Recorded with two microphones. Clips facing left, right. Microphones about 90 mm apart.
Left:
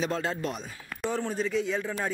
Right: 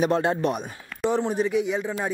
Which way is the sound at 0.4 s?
60° right (ahead or behind).